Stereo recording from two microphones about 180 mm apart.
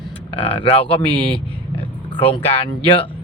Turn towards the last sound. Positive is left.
turn(degrees=30)  # may be behind; listen again after turning